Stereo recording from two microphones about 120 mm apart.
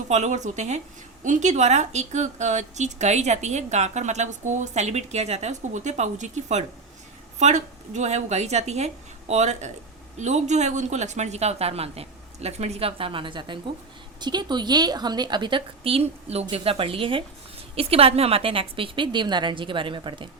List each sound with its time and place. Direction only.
0.1 s speech: 75° right (ahead or behind)
1.2 s a woman's voice: 85° right; by 20.2 s 45° right (ahead or behind)